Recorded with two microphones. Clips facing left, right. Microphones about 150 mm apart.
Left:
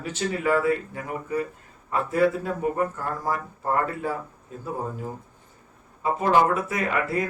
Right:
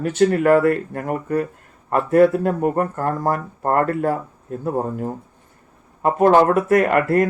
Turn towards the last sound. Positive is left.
turn(degrees=-60)  # may be behind; listen again after turning